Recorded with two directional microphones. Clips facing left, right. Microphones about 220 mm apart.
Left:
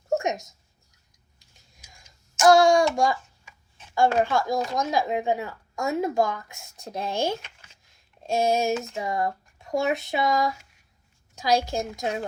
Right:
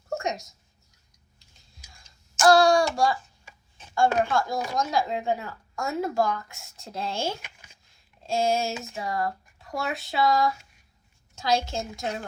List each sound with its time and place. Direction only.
0.1 s a sound: 20° left (ahead or behind)
2.5 s child singing: 20° left (ahead or behind)
3.9 s speech: 20° left (ahead or behind)
7.4 s a sound: 15° right (ahead or behind)
8.3 s child singing: 20° left (ahead or behind)
9.0 s speech: 20° left (ahead or behind)